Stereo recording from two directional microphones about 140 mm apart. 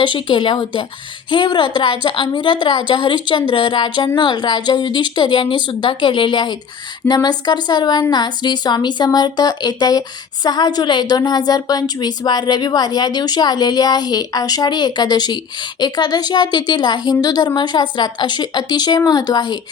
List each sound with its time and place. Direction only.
0.0 s a woman's voice: 35° left (ahead or behind)